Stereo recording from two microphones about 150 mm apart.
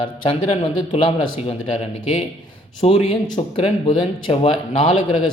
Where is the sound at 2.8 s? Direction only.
40° left (ahead or behind).